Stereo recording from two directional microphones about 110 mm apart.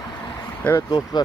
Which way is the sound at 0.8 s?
40° left (ahead or behind).